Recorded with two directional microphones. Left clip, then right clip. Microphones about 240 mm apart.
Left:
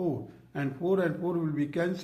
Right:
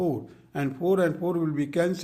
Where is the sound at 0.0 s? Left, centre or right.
Right.